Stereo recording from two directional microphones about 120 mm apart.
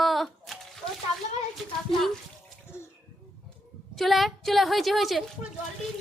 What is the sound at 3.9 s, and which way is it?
A woman's voice, centre (ahead or behind).